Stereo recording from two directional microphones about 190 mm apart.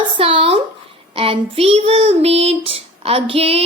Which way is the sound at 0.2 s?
30° right (ahead or behind).